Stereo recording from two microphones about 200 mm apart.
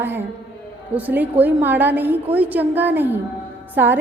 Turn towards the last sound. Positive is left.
turn(degrees=-10)  # may be behind; listen again after turning